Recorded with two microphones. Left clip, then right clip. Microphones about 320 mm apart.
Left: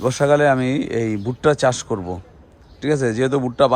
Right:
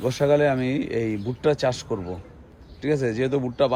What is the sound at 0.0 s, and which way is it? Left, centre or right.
A man's voice, centre.